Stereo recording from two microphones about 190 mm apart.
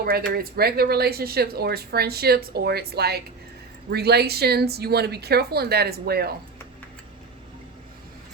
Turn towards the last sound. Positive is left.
turn(degrees=-55)  # may be behind; listen again after turning